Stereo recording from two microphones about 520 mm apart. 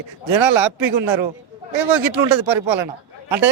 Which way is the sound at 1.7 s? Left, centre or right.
Right.